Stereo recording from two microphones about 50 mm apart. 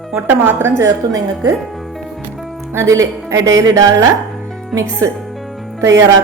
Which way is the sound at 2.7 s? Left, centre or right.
Right.